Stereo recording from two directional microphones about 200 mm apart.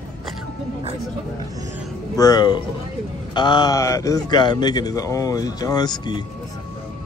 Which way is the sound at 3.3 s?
20° left (ahead or behind).